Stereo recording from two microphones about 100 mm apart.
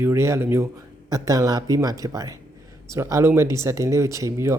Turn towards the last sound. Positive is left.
turn(degrees=-30)  # may be behind; listen again after turning